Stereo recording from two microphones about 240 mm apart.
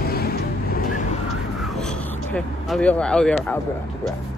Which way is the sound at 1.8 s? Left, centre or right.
Centre.